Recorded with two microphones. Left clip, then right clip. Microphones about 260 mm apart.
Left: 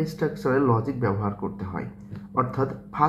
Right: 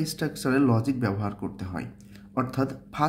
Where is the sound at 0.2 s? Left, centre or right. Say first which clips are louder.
Left 2 dB; right.